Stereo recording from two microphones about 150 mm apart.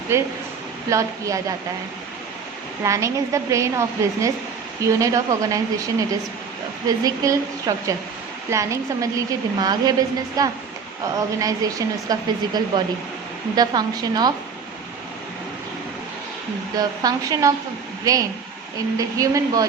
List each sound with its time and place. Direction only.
0.1 s a woman's voice: 20° right (ahead or behind)
2.8 s a woman's voice: 20° right (ahead or behind)
16.7 s a woman's voice: 25° right (ahead or behind)